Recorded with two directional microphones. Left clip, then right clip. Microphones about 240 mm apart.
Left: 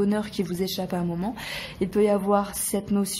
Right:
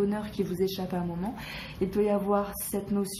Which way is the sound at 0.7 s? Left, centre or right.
Left.